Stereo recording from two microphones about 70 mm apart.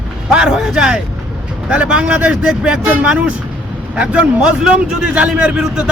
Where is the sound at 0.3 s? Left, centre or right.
Centre.